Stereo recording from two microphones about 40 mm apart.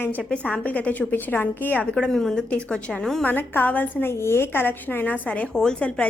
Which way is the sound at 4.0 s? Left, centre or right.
Left.